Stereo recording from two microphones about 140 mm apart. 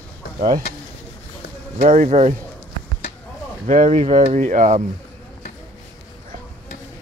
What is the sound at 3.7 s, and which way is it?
Speech, 60° right (ahead or behind).